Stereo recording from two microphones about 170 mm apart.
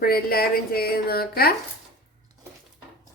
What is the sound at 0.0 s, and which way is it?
A woman's voice, 60° left (ahead or behind).